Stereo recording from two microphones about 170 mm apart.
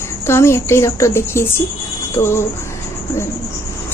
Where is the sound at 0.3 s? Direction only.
15° left (ahead or behind).